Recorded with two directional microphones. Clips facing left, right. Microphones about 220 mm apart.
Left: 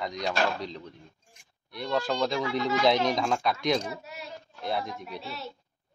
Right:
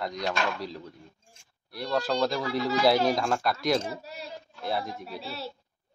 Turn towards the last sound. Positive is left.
turn(degrees=-30)  # may be behind; listen again after turning